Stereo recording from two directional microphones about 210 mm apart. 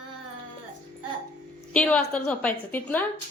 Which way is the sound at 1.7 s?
5° left (ahead or behind).